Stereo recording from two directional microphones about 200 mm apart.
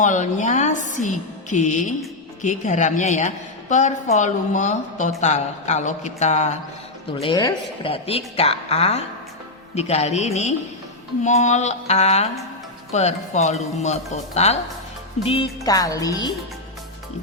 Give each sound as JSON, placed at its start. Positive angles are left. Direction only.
{"t": 0.0, "sound": "a woman's voice", "side_deg": 35}
{"t": 7.2, "sound": "a woman's voice", "side_deg": 20}